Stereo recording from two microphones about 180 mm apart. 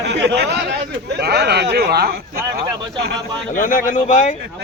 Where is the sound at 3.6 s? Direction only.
45° left (ahead or behind).